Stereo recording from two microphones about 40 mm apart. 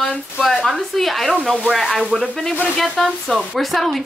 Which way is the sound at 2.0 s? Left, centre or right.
Right.